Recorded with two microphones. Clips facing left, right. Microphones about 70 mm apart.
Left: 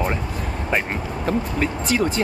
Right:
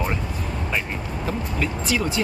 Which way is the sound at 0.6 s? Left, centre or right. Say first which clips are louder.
Left 6 dB; left.